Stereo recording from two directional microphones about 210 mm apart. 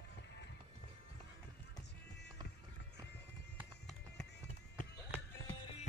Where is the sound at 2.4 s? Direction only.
55° left (ahead or behind).